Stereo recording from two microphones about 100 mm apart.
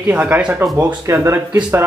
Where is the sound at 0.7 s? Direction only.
30° right (ahead or behind).